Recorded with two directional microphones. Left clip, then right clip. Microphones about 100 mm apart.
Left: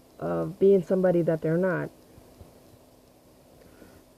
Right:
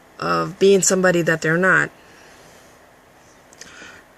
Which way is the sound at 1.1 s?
35° right (ahead or behind).